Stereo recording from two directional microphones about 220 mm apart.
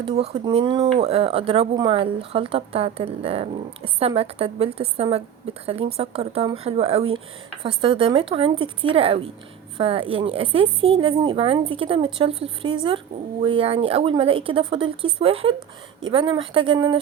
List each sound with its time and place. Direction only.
0.2 s speech: 25° right (ahead or behind)